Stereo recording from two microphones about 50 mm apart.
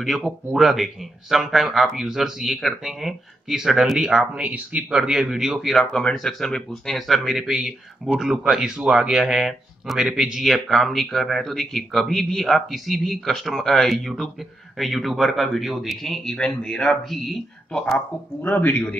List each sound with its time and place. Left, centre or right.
0.0 s speech: centre
4.4 s speech: right
4.9 s speech: centre
6.4 s speech: centre
7.0 s speech: centre
7.5 s speech: centre
10.4 s speech: centre
16.3 s speech: centre
18.4 s speech: left